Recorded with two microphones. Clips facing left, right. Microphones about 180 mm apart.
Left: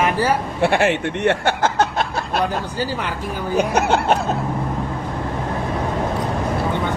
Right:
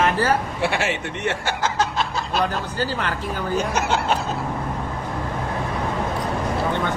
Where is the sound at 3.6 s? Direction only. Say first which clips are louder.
Left 8 dB; 60° left (ahead or behind).